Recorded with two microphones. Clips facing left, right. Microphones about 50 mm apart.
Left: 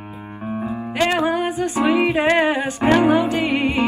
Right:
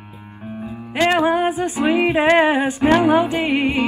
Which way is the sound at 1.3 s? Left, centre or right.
Right.